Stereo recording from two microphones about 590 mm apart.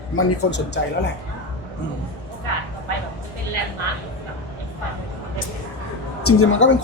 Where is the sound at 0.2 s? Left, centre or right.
Centre.